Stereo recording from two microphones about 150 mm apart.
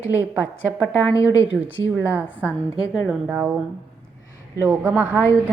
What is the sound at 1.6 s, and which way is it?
A woman's voice, 15° right (ahead or behind).